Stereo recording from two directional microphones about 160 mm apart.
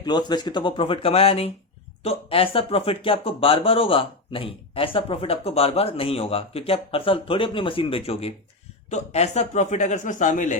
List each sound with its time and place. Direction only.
0.0 s a man's voice: 25° left (ahead or behind); by 10.6 s 50° left (ahead or behind)